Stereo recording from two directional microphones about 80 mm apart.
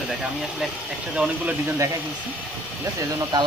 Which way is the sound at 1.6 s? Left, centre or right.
Right.